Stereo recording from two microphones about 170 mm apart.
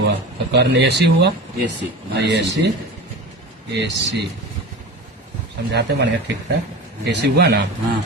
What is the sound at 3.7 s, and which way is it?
Speech, 90° right.